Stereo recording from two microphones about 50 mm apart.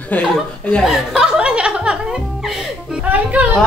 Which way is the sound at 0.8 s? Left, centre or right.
Centre.